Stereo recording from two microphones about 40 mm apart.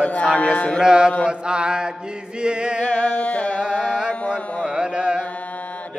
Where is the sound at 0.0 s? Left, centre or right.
Left.